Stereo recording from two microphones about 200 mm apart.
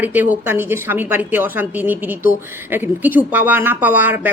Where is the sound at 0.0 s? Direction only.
10° right (ahead or behind).